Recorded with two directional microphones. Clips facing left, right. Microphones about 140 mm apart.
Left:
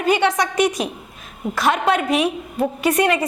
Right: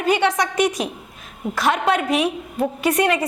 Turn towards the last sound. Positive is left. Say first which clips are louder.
# left 1 dB
turn(degrees=10)  # may be behind; listen again after turning